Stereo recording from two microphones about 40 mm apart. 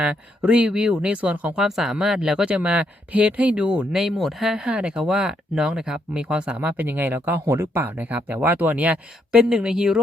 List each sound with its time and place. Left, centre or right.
0.0 s speech: right
1.5 s speech: centre
2.5 s speech: right
4.2 s speech: centre
4.7 s speech: right
6.7 s speech: right
7.9 s speech: right
9.3 s speech: right